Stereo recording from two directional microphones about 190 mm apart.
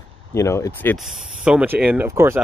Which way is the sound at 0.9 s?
Centre (ahead or behind).